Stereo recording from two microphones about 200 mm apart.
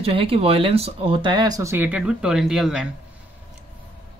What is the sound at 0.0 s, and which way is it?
Speech, 30° right (ahead or behind).